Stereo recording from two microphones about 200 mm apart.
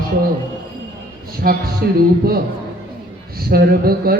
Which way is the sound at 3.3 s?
50° right (ahead or behind).